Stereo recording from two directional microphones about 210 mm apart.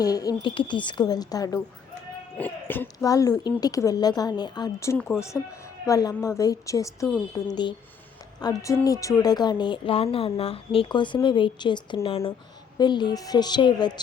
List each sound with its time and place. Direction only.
0.0 s speech: 15° left (ahead or behind)